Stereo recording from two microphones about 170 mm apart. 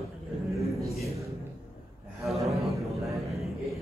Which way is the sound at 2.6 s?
Centre (ahead or behind).